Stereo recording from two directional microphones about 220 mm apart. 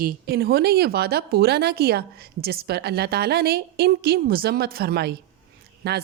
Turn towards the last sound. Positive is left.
turn(degrees=-45)  # may be behind; listen again after turning